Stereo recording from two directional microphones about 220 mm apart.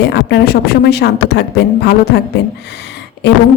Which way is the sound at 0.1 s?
45° left (ahead or behind).